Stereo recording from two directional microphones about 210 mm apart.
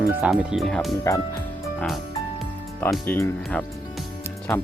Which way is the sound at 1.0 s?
15° left (ahead or behind).